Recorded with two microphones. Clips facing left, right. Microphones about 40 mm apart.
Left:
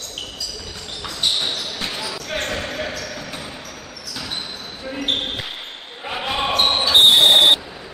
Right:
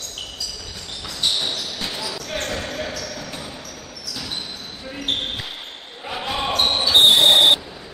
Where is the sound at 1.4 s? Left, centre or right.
Centre.